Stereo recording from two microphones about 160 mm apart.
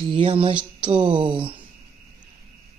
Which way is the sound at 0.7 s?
30° right (ahead or behind).